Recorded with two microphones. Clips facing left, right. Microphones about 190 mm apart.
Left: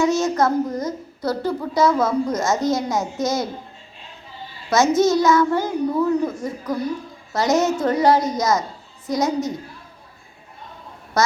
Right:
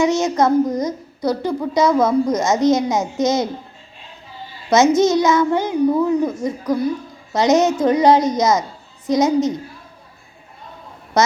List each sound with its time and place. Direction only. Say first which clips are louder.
0.0 s a woman's voice: right 2 dB; 20° right (ahead or behind)
4.7 s a child's voice: right 3 dB; 20° right (ahead or behind)